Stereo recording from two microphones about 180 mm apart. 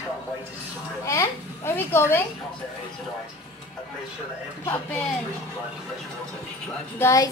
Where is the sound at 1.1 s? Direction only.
15° left (ahead or behind).